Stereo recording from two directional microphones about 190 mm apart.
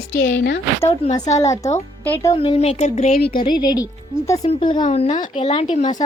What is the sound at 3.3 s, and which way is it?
A woman's voice, 25° left (ahead or behind).